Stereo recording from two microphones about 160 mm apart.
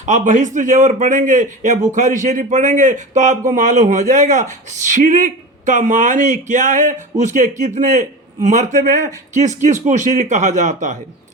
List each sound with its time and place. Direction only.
0.0 s a man's voice: 50° right (ahead or behind)